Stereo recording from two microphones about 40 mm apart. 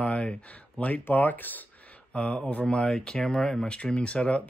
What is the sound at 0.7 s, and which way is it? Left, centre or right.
Speech, left.